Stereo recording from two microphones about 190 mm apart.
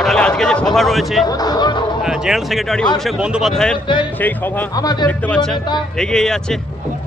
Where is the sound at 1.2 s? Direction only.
20° left (ahead or behind).